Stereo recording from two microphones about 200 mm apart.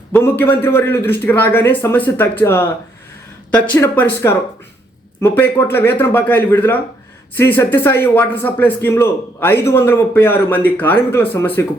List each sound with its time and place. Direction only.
0.1 s a man's voice: 10° left (ahead or behind)